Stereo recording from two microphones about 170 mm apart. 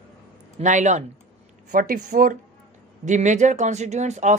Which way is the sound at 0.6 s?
45° right (ahead or behind).